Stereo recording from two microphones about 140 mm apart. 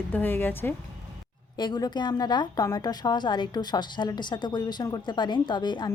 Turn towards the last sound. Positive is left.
turn(degrees=30)  # may be behind; listen again after turning